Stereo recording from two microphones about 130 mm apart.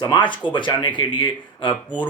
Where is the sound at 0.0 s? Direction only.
35° left (ahead or behind).